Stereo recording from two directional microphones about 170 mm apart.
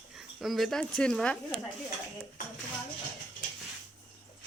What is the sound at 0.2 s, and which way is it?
A woman's voice, centre (ahead or behind).